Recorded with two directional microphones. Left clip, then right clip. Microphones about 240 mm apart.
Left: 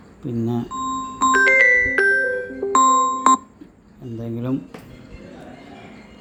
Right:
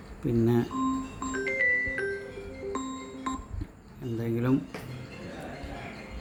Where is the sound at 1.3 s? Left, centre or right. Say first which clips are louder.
Left 12 dB; left.